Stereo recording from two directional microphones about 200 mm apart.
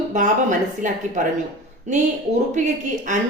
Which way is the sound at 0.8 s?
40° right (ahead or behind).